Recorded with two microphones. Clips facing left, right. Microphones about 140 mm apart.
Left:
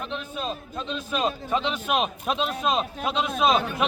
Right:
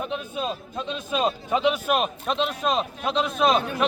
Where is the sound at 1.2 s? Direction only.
10° right (ahead or behind).